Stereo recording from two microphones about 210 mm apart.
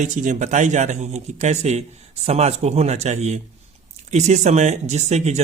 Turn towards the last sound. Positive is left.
turn(degrees=-30)  # may be behind; listen again after turning